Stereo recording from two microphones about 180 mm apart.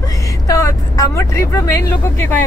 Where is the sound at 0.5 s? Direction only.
20° left (ahead or behind).